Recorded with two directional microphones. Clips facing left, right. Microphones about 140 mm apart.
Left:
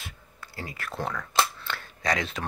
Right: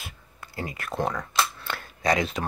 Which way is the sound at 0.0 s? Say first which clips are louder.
Right 1 dB; 20° right (ahead or behind).